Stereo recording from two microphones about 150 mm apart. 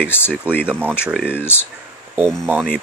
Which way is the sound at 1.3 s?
15° left (ahead or behind).